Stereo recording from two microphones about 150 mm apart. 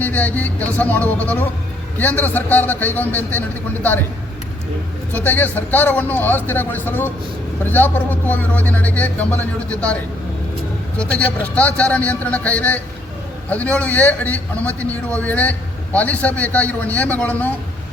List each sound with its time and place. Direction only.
0.0 s a man's voice: 10° left (ahead or behind)
5.1 s a man's voice: 10° left (ahead or behind)